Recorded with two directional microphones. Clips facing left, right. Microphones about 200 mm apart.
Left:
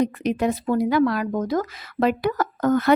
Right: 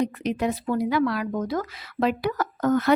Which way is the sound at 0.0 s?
45° left (ahead or behind).